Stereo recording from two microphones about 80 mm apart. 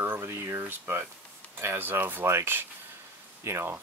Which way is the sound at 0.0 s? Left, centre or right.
Right.